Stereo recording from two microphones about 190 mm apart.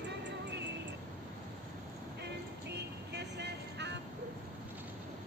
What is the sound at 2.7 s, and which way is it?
Music, 60° right (ahead or behind).